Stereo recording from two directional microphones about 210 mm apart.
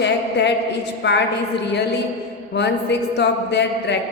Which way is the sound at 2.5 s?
55° left (ahead or behind).